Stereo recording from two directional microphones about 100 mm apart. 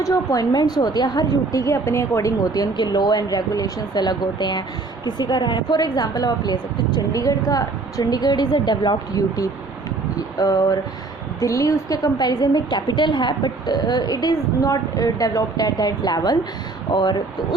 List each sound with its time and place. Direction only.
0.0 s a woman's voice: 35° left (ahead or behind)
2.7 s a woman's voice: 45° left (ahead or behind)